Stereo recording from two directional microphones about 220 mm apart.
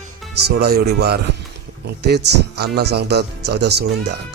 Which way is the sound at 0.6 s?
45° right (ahead or behind).